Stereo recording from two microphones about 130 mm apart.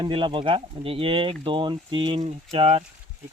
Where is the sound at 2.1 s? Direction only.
50° right (ahead or behind).